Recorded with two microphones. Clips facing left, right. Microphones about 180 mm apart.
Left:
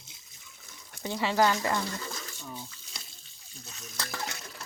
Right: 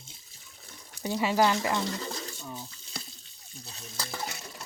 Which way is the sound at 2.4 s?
5° right (ahead or behind).